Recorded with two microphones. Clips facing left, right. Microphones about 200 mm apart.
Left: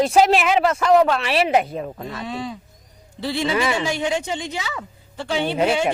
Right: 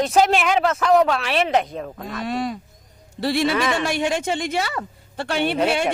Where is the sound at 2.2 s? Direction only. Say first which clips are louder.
Right 5 dB; 75° right (ahead or behind).